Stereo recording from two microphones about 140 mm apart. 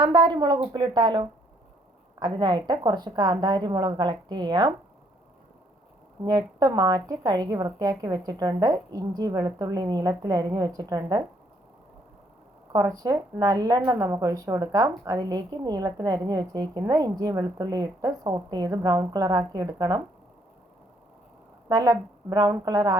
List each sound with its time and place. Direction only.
0.0 s a woman's voice: 35° right (ahead or behind)
6.2 s a woman's voice: 25° right (ahead or behind)
12.7 s a woman's voice: 25° right (ahead or behind)
21.7 s a woman's voice: 25° right (ahead or behind)